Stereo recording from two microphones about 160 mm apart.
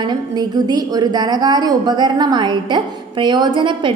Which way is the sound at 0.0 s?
25° right (ahead or behind).